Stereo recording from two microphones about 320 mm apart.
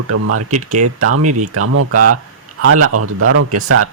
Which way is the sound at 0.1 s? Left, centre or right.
Right.